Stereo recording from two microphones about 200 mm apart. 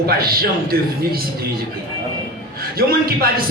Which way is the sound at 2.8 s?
50° right (ahead or behind).